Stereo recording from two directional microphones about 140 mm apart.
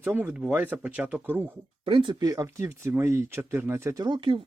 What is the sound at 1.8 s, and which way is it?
Speech, 40° right (ahead or behind).